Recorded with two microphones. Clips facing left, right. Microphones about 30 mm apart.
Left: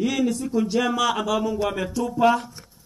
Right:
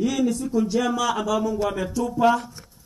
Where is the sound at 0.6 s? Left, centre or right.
Left.